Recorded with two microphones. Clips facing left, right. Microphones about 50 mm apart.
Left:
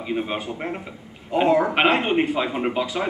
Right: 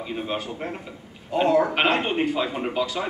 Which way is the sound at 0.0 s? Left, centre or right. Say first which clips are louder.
Left 3 dB; centre.